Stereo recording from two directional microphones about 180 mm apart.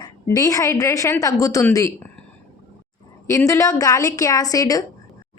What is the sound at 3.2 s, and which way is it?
A woman's voice, 15° left (ahead or behind).